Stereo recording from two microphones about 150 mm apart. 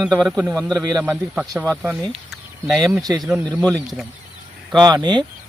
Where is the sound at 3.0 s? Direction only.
25° right (ahead or behind).